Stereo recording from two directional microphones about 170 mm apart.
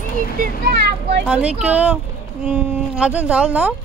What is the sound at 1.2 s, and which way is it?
Speech, 5° right (ahead or behind).